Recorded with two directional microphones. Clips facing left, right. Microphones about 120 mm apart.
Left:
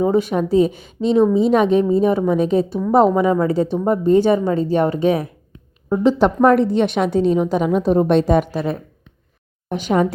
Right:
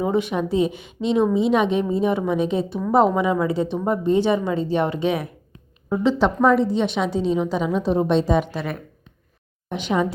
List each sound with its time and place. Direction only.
0.0 s a woman's voice: 40° left (ahead or behind); by 8.4 s 55° left (ahead or behind)
9.6 s speech: 45° left (ahead or behind)